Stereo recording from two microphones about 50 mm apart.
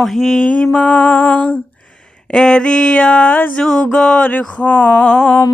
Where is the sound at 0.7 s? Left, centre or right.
Left.